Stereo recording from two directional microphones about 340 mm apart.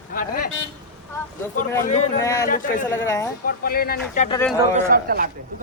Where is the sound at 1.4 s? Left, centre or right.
Centre.